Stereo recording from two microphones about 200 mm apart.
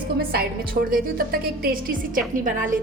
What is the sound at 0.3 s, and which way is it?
A woman's voice, 50° right (ahead or behind).